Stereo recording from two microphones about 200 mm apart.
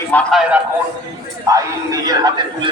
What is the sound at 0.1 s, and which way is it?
Speech, 5° left (ahead or behind).